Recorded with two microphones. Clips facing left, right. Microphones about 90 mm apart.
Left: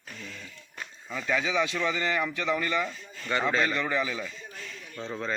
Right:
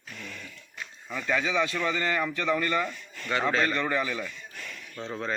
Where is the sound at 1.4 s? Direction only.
15° left (ahead or behind).